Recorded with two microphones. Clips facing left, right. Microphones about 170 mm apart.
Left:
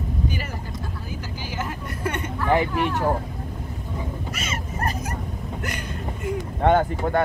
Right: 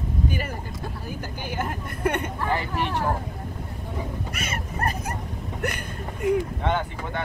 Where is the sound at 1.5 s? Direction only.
55° right (ahead or behind).